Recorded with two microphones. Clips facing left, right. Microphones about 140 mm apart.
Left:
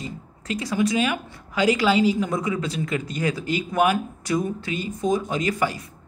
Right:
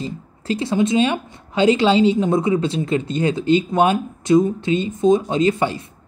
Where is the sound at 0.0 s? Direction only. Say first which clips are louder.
Right 6 dB; 30° right (ahead or behind).